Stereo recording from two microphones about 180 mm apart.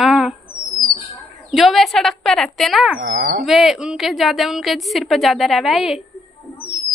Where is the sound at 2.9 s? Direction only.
65° right (ahead or behind).